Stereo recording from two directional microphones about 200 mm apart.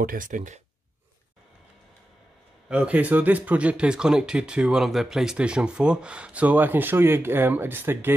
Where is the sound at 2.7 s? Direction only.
5° right (ahead or behind).